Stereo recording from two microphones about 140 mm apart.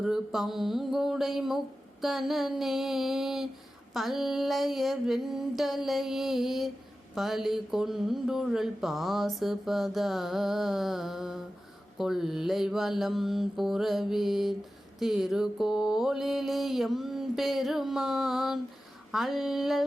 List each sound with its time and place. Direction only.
0.0 s speech: 5° right (ahead or behind)